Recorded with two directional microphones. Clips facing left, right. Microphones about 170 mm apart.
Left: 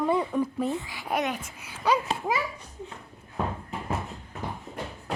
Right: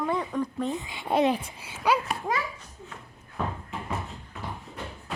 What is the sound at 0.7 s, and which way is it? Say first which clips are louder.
A child's voice: right 3 dB; 20° right (ahead or behind).